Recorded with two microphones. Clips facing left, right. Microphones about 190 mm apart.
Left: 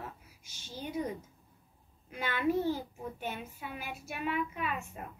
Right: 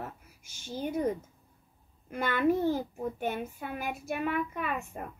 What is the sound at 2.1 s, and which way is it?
A child's voice, 50° right (ahead or behind).